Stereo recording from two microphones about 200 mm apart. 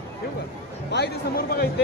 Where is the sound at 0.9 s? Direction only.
50° left (ahead or behind).